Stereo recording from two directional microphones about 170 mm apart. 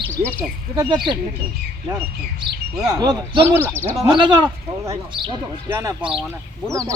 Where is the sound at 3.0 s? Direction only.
20° right (ahead or behind).